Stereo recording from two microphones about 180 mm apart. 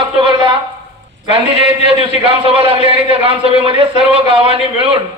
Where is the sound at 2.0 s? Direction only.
30° right (ahead or behind).